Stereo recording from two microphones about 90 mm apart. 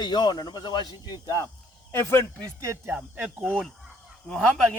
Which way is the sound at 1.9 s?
25° left (ahead or behind).